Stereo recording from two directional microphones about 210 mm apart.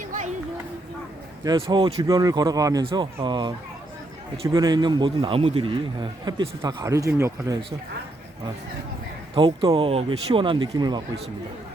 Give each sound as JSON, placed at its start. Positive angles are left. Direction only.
{"t": 1.5, "sound": "a man's voice", "side_deg": -20}
{"t": 9.3, "sound": "a man's voice", "side_deg": -25}